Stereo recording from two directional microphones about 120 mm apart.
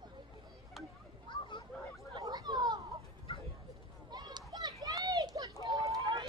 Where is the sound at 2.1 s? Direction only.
35° right (ahead or behind).